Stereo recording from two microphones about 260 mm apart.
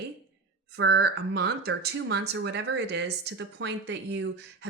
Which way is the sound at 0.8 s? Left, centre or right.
Right.